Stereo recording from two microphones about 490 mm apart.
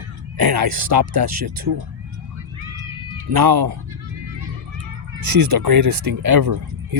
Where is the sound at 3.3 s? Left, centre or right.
Right.